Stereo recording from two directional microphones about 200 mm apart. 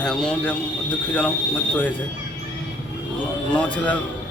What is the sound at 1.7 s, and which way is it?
Speech, 10° left (ahead or behind).